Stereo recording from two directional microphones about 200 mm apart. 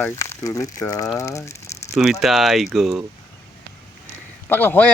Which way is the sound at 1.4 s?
35° left (ahead or behind).